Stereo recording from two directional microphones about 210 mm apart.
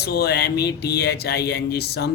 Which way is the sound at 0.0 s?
50° left (ahead or behind).